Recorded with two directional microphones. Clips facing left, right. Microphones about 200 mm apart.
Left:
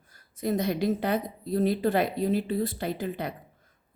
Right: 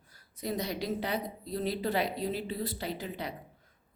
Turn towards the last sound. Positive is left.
turn(degrees=50)  # may be behind; listen again after turning